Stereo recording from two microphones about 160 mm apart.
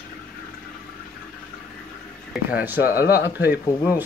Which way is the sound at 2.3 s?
10° right (ahead or behind).